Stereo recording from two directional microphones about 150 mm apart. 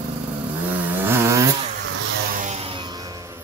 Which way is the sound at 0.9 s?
15° right (ahead or behind).